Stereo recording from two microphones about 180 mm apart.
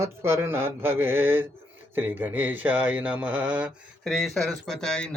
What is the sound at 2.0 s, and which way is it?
Speech, 10° right (ahead or behind).